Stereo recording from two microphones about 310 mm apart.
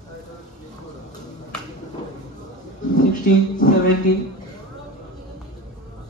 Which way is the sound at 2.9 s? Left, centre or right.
Left.